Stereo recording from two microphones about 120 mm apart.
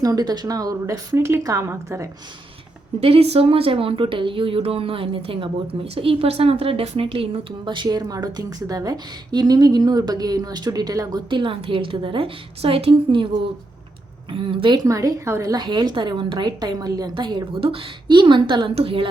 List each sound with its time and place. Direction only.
0.0 s speech: 30° right (ahead or behind)
3.0 s speech: 55° right (ahead or behind); by 11.2 s 30° right (ahead or behind)
11.3 s speech: 45° right (ahead or behind)
14.8 s speech: 25° right (ahead or behind)
15.5 s a woman's voice: 40° right (ahead or behind)
18.7 s speech: 50° right (ahead or behind)